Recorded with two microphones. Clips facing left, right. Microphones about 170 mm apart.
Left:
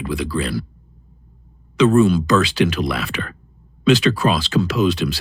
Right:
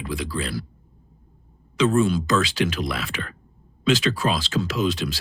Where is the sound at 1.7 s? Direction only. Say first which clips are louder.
Left 6 dB; 65° left (ahead or behind).